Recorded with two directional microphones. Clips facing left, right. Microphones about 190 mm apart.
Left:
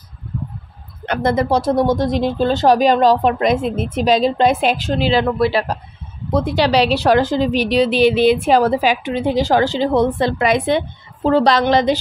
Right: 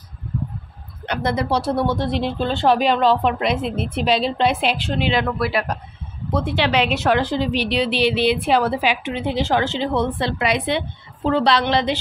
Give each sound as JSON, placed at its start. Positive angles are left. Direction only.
{"t": 1.0, "sound": "a woman's voice", "side_deg": 50}